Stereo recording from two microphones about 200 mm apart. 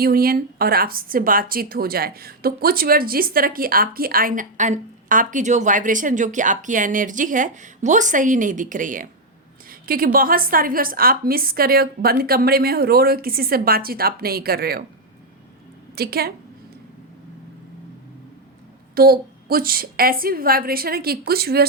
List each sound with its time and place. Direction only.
0.0 s speech: 45° right (ahead or behind)
16.0 s speech: 50° right (ahead or behind)
18.9 s speech: 50° right (ahead or behind)